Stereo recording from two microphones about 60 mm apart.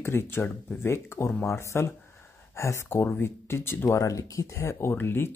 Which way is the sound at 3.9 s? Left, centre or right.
Left.